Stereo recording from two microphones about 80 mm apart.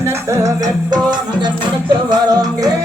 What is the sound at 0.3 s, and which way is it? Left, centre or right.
Music, right.